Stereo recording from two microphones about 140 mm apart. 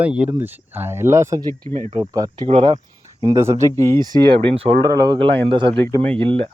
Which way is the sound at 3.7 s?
20° left (ahead or behind).